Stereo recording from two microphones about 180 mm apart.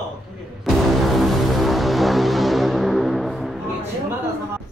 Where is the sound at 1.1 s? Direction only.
Centre (ahead or behind).